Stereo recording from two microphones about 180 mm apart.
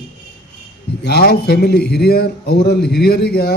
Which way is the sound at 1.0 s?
65° left (ahead or behind).